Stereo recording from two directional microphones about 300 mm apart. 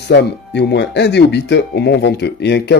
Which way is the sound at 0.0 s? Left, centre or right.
Left.